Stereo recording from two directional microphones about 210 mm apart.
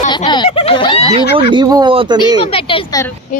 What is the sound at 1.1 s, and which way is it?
Speech, 25° right (ahead or behind).